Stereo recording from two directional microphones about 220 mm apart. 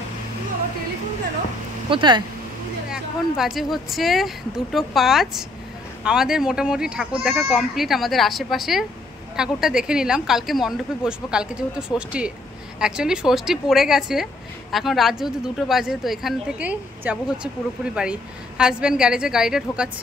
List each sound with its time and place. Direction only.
1.9 s speech: 20° right (ahead or behind)
2.9 s speech: centre (ahead or behind)